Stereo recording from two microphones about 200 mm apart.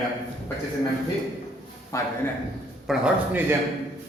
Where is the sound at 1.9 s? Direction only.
15° left (ahead or behind).